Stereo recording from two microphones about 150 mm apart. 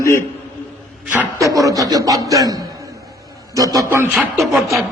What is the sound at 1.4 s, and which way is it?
Speech, 20° right (ahead or behind).